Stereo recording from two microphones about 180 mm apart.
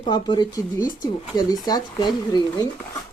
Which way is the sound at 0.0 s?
25° left (ahead or behind).